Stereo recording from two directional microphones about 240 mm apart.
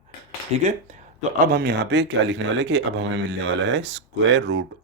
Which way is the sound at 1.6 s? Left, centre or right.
Right.